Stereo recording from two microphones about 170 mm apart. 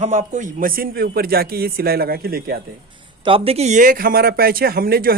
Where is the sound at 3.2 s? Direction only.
35° right (ahead or behind); by 5.1 s 60° right (ahead or behind).